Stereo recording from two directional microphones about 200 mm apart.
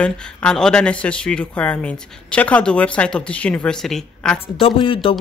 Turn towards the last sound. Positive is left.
turn(degrees=25)  # may be behind; listen again after turning